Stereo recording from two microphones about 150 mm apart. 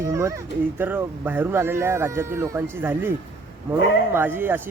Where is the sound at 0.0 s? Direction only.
20° right (ahead or behind).